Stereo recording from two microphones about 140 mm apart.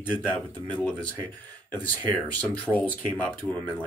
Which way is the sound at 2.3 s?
10° left (ahead or behind).